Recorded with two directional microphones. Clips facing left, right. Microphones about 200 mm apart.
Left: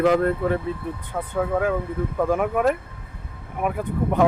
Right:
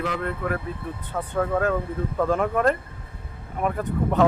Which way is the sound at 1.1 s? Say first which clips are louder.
Even; 10° left (ahead or behind).